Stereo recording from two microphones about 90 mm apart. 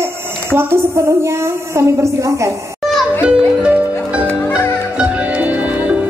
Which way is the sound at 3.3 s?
10° right (ahead or behind).